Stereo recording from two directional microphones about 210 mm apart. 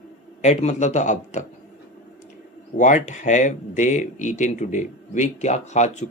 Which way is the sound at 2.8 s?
35° left (ahead or behind).